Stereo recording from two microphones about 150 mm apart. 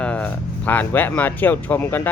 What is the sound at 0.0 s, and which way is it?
Speech, 10° left (ahead or behind).